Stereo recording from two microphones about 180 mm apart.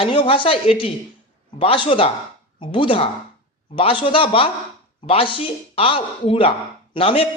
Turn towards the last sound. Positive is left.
turn(degrees=30)  # may be behind; listen again after turning